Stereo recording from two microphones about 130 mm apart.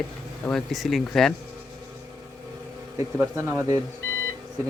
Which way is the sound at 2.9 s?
20° right (ahead or behind).